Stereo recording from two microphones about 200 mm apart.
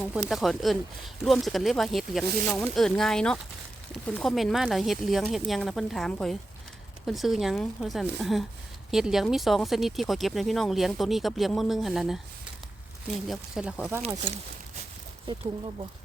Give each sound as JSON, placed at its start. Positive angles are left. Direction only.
{"t": 0.0, "sound": "speech", "side_deg": -5}
{"t": 13.2, "sound": "speech", "side_deg": 0}
{"t": 15.3, "sound": "speech", "side_deg": -25}